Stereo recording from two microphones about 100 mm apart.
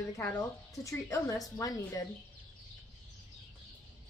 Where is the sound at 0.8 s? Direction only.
35° left (ahead or behind).